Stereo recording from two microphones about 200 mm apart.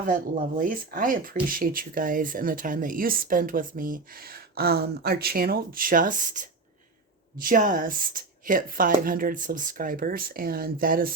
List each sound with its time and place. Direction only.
0.0 s speech: 40° right (ahead or behind)